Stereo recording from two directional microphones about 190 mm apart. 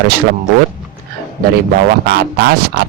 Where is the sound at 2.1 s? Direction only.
55° right (ahead or behind).